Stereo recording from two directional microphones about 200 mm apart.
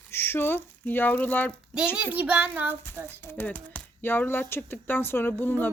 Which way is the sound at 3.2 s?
10° left (ahead or behind).